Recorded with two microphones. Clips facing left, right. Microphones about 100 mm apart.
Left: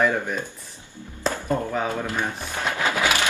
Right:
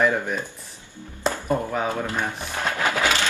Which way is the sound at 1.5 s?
5° right (ahead or behind).